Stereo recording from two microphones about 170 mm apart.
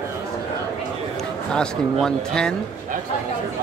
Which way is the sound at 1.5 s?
5° left (ahead or behind).